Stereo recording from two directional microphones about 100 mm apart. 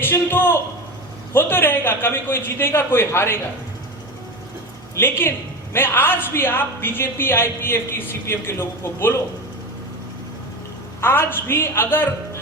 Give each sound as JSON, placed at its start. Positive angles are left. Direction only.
{"t": 0.0, "sound": "speech", "side_deg": 20}
{"t": 4.9, "sound": "speech", "side_deg": 20}
{"t": 11.0, "sound": "speech", "side_deg": 25}